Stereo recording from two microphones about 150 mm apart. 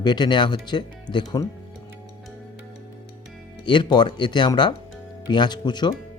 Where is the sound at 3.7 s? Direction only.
30° left (ahead or behind).